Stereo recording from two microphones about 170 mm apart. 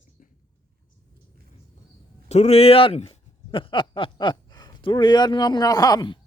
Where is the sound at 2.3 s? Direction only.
40° left (ahead or behind); by 6.1 s 25° left (ahead or behind).